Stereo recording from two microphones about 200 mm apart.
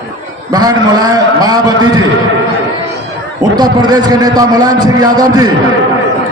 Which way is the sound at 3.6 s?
20° right (ahead or behind).